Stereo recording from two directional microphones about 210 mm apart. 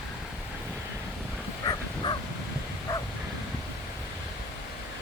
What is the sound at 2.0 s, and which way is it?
Bow-wow, 20° left (ahead or behind).